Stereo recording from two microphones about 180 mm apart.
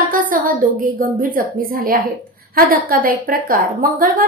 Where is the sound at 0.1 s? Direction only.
50° right (ahead or behind).